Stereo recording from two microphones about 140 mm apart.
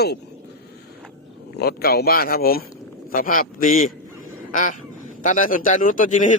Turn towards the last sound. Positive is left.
turn(degrees=65)  # may be behind; listen again after turning